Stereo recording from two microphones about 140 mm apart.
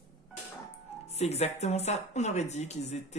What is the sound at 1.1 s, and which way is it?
Speech, 50° left (ahead or behind).